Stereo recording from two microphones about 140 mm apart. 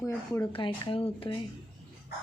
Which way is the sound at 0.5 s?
40° left (ahead or behind).